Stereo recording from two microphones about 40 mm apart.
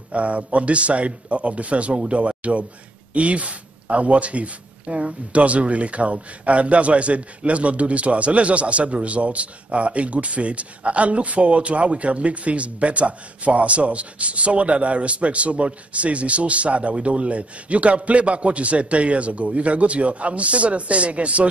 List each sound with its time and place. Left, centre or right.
0.1 s a man's voice: right